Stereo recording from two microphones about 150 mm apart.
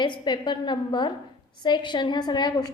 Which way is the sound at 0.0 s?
30° left (ahead or behind).